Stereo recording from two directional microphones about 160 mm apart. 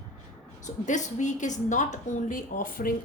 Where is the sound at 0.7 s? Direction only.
50° left (ahead or behind).